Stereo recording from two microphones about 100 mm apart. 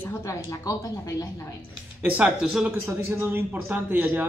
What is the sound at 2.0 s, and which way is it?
A man's voice, 15° right (ahead or behind).